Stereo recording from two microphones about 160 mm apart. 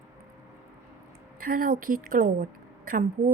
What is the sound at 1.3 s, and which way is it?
A woman's voice, 65° right (ahead or behind).